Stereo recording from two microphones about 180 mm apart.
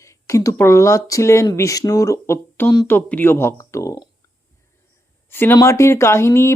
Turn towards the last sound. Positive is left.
turn(degrees=15)  # may be behind; listen again after turning